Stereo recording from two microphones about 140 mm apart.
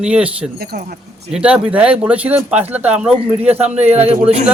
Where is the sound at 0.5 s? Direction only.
90° right.